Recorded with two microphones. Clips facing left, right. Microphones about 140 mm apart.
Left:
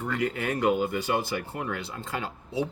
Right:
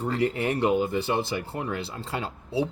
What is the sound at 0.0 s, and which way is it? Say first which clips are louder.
Speech: right 3 dB; 30° right (ahead or behind).